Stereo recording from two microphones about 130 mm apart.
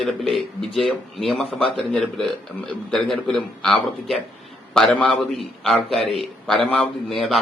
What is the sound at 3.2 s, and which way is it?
A man's voice, centre (ahead or behind).